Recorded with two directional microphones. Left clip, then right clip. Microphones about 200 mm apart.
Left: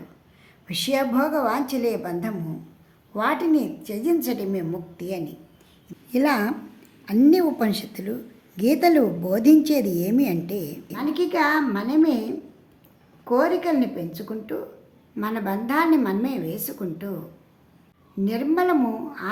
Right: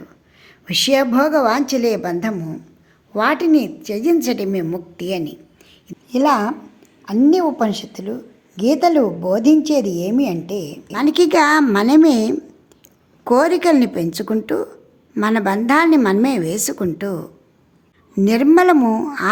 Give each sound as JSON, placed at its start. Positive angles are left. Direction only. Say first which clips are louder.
{"t": 0.4, "sound": "a woman's voice", "louder": "right 10 dB", "side_deg": -30}
{"t": 6.1, "sound": "a woman's voice", "louder": "right 6 dB", "side_deg": -10}
{"t": 10.9, "sound": "a woman's voice", "louder": "right 10 dB", "side_deg": -55}
{"t": 18.3, "sound": "a woman's voice", "louder": "right 10 dB", "side_deg": -50}